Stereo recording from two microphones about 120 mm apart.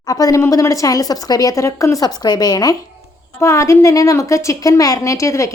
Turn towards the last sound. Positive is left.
turn(degrees=25)  # may be behind; listen again after turning